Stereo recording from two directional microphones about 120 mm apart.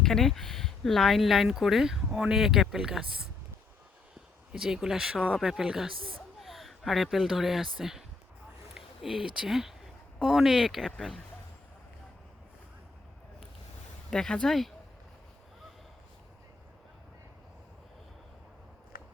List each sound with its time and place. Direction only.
0.0 s speech: 5° left (ahead or behind)
4.5 s speech: 5° right (ahead or behind)
14.1 s speech: 5° left (ahead or behind)